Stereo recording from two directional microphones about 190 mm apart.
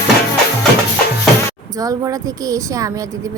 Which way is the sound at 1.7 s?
20° right (ahead or behind).